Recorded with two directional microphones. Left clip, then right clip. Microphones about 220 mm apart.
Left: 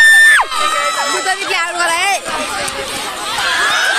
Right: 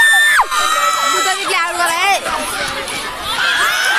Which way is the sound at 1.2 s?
5° right (ahead or behind).